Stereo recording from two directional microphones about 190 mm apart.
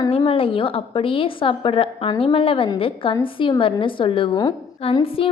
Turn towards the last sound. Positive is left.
turn(degrees=30)  # may be behind; listen again after turning